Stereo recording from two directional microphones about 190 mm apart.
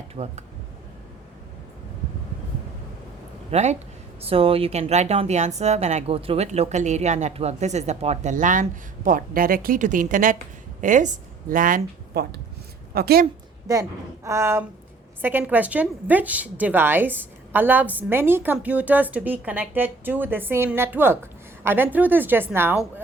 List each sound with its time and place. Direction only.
0.2 s speech: 35° right (ahead or behind)
3.5 s a woman's voice: 35° right (ahead or behind); by 13.2 s 55° right (ahead or behind)
14.3 s a woman's voice: 15° right (ahead or behind)